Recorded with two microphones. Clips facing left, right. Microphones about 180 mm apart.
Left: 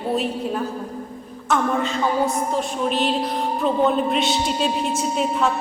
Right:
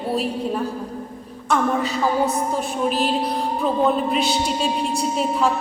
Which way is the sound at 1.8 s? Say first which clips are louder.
Even; 40° right (ahead or behind).